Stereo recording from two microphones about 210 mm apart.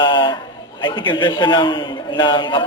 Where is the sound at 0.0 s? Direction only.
20° left (ahead or behind).